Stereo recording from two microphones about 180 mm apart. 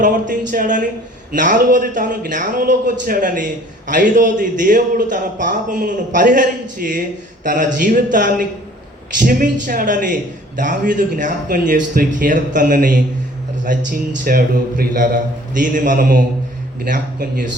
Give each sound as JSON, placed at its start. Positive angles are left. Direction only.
{"t": 0.0, "sound": "a man's voice", "side_deg": -45}